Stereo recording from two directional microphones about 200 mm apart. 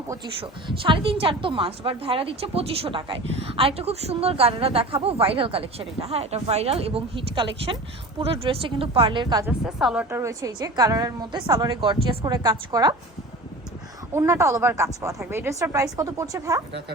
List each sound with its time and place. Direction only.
0.7 s a woman's voice: 25° right (ahead or behind)
9.5 s a woman's voice: 5° right (ahead or behind)
14.1 s speech: 15° right (ahead or behind)